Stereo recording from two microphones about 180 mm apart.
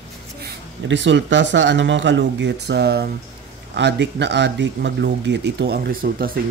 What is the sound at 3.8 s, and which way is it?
Speech, 75° right (ahead or behind).